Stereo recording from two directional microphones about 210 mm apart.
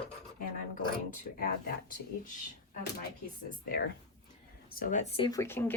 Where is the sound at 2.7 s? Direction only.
50° left (ahead or behind).